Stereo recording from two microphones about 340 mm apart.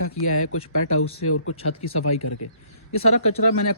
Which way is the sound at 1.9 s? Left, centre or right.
Left.